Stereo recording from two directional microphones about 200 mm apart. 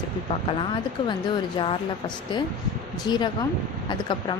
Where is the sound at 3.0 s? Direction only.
20° left (ahead or behind).